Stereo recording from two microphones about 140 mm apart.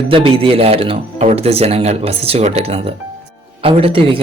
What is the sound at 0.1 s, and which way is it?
Speech, 40° right (ahead or behind).